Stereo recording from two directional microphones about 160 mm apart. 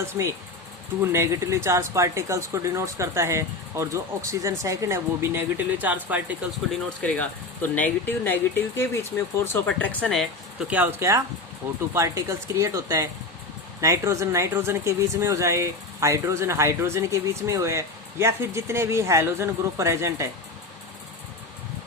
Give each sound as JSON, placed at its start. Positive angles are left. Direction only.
{"t": 0.0, "sound": "speech", "side_deg": -15}
{"t": 7.0, "sound": "speech", "side_deg": 10}
{"t": 11.0, "sound": "speech", "side_deg": -15}